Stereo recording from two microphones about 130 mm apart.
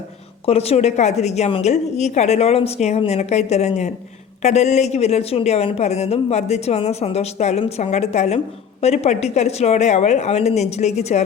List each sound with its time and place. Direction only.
0.4 s speech: 50° left (ahead or behind)